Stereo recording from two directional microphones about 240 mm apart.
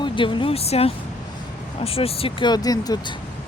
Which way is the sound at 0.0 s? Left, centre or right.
Centre.